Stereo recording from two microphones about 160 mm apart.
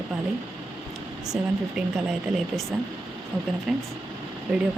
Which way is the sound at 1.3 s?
5° right (ahead or behind).